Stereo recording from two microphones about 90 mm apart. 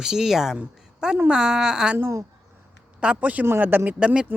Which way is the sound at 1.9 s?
25° right (ahead or behind).